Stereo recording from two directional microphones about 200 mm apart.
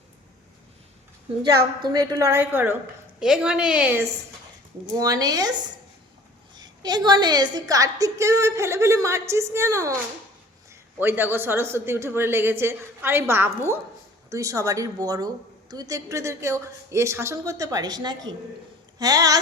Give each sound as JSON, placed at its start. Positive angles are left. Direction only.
{"t": 1.5, "sound": "a woman's voice", "side_deg": -20}
{"t": 11.0, "sound": "a woman's voice", "side_deg": -10}